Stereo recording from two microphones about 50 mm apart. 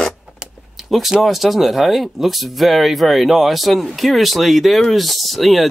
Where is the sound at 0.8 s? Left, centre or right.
Centre.